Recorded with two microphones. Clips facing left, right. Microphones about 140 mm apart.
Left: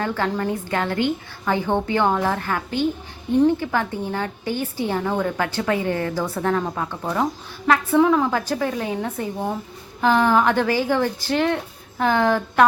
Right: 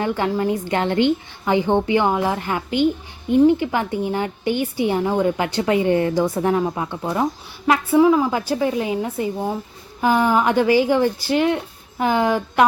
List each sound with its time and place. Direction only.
0.0 s a woman's voice: 15° right (ahead or behind)